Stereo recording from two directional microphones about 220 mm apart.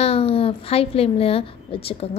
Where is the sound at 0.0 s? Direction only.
25° left (ahead or behind).